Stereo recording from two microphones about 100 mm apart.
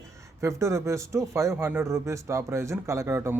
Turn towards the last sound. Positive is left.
turn(degrees=-30)  # may be behind; listen again after turning